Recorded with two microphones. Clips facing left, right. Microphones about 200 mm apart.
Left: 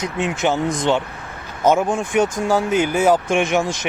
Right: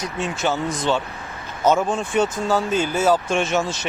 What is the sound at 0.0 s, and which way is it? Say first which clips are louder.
Speech: left 3 dB; 15° left (ahead or behind).